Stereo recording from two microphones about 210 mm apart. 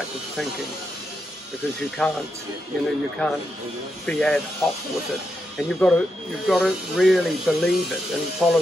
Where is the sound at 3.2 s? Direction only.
5° left (ahead or behind).